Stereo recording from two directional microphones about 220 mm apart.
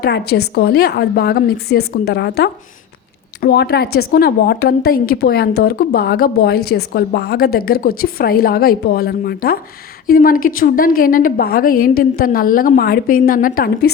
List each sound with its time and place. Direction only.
0.0 s a woman's voice: 45° left (ahead or behind)